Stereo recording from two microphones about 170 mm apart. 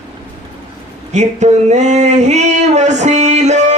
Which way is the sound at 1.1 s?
45° right (ahead or behind).